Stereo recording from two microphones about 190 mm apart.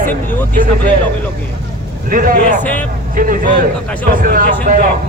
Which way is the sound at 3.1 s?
45° right (ahead or behind).